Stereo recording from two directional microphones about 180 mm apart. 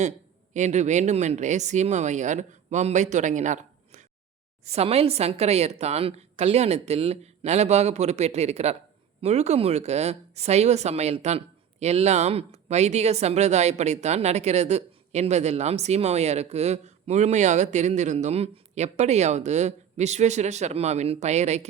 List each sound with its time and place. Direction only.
0.5 s speech: 40° right (ahead or behind)